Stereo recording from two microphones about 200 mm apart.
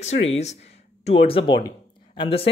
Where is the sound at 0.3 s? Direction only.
35° left (ahead or behind).